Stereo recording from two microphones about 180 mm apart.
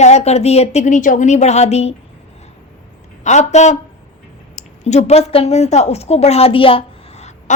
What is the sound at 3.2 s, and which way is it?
A woman's voice, 40° left (ahead or behind).